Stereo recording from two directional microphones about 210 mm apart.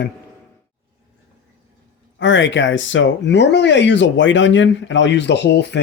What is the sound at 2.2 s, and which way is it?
Speech, 60° left (ahead or behind).